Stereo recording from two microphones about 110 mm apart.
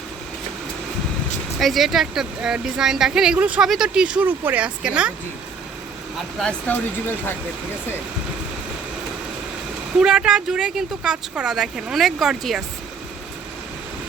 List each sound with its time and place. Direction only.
1.5 s speech: centre (ahead or behind)
6.4 s speech: 10° left (ahead or behind)
10.0 s speech: 10° right (ahead or behind)